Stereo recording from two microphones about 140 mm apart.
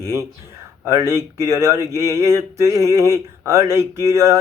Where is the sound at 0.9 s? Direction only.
20° right (ahead or behind).